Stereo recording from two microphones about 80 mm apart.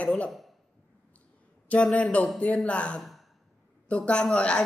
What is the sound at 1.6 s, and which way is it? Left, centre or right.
Speech, centre.